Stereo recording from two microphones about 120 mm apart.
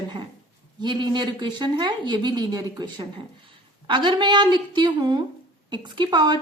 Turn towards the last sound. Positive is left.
turn(degrees=-35)  # may be behind; listen again after turning